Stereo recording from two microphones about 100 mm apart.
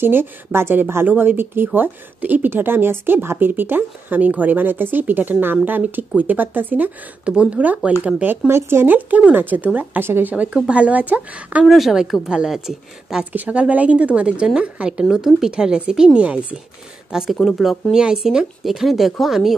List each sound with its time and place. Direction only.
0.0 s speech: 25° right (ahead or behind)
11.6 s a woman's voice: centre (ahead or behind)